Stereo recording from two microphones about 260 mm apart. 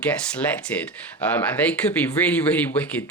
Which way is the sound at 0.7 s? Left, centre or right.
Centre.